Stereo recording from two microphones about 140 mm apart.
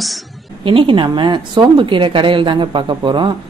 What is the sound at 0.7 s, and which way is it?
A woman's voice, 40° right (ahead or behind).